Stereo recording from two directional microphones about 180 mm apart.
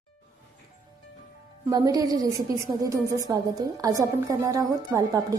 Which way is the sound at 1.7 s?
20° right (ahead or behind).